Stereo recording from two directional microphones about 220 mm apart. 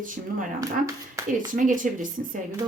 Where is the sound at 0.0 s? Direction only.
35° right (ahead or behind).